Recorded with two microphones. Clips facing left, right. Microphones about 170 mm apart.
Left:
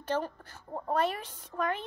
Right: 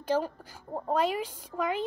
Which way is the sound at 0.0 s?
10° right (ahead or behind).